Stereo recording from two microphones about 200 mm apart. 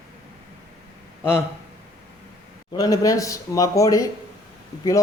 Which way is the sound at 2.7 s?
20° left (ahead or behind).